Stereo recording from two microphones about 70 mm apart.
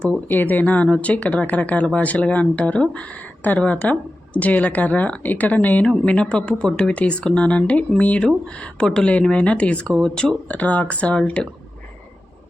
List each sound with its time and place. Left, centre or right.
0.3 s speech: left
9.9 s speech: centre
10.2 s speech: left